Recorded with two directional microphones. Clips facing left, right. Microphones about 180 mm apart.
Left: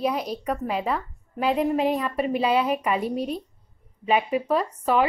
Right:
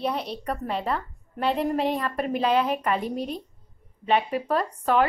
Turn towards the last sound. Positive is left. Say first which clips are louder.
# left 1 dB
turn(degrees=5)  # may be behind; listen again after turning